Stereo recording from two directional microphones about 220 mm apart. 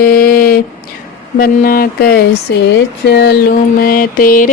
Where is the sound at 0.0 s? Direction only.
40° left (ahead or behind).